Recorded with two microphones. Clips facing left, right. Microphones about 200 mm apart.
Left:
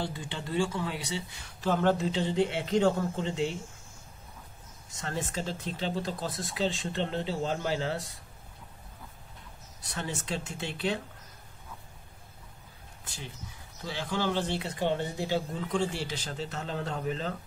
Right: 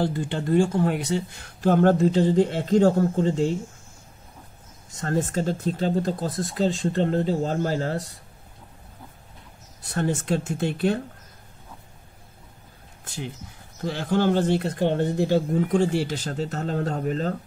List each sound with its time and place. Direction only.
0.0 s speech: 55° right (ahead or behind)
5.0 s speech: 50° right (ahead or behind)
9.8 s speech: 50° right (ahead or behind)
13.0 s speech: 50° right (ahead or behind)